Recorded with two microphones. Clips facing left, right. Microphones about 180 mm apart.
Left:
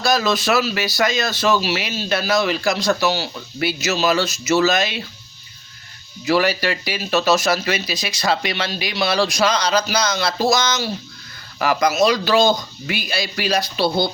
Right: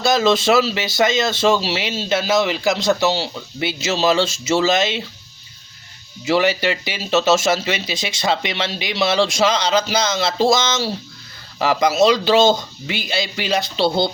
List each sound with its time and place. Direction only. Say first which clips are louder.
0.0 s speech: right 3 dB; 25° right (ahead or behind)
6.2 s speech: right 1 dB; 20° right (ahead or behind)